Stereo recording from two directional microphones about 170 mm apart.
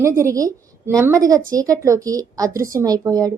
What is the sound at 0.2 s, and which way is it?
A woman's voice, 20° right (ahead or behind).